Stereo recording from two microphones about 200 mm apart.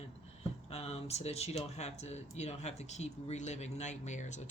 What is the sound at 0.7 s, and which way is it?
Speech, 30° left (ahead or behind).